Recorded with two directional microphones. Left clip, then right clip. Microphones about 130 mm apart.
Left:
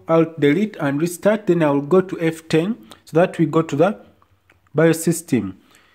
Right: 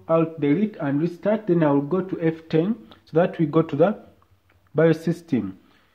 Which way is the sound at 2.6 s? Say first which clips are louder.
Left 3 dB; 80° left.